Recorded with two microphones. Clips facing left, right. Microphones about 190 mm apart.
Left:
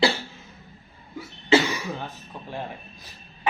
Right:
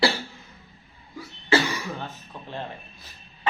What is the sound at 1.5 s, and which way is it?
Cough, 25° left (ahead or behind).